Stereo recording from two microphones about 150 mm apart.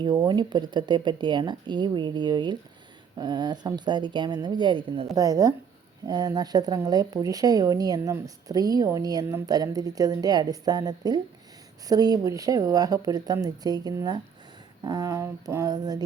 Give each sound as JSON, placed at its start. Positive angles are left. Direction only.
{"t": 0.3, "sound": "a woman's voice", "side_deg": -30}
{"t": 5.1, "sound": "a woman's voice", "side_deg": -20}